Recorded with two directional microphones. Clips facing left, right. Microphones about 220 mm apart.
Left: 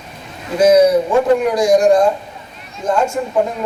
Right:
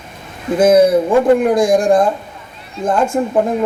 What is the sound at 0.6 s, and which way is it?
Speech, 50° right (ahead or behind).